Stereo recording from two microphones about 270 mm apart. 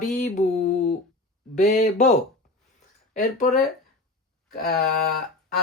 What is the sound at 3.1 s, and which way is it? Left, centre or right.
Speech, left.